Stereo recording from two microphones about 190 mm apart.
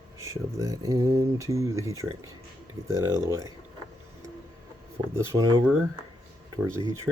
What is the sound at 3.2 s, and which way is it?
Speech, 15° right (ahead or behind).